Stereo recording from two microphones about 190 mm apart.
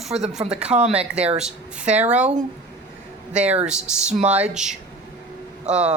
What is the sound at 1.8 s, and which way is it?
Speech, 35° right (ahead or behind).